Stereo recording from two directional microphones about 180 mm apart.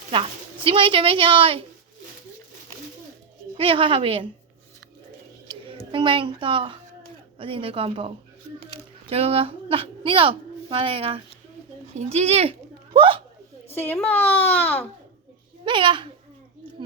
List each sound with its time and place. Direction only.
0.1 s a woman's voice: 30° right (ahead or behind)
3.6 s a child's voice: 30° right (ahead or behind)
5.9 s a child's voice: 25° right (ahead or behind)
13.7 s a child's voice: 10° left (ahead or behind)
15.6 s a child's voice: 25° right (ahead or behind)